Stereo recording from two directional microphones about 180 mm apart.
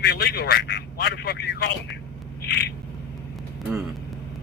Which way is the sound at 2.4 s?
70° left (ahead or behind).